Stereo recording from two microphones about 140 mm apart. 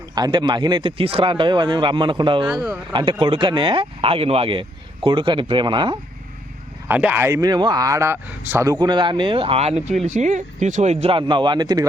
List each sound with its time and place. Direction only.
0.2 s speech: 30° right (ahead or behind)
2.4 s speech: 20° right (ahead or behind)
3.1 s speech: 40° right (ahead or behind)
6.8 s speech: 15° right (ahead or behind); by 11.1 s 60° right (ahead or behind)
11.1 s speech: 35° right (ahead or behind)